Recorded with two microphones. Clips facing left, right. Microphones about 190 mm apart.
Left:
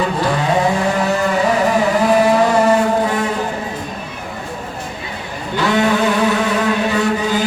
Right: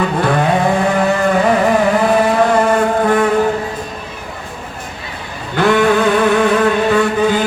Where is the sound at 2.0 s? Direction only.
55° right (ahead or behind).